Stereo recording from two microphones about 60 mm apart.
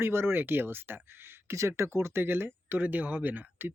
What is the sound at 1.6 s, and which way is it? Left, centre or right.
Speech, right.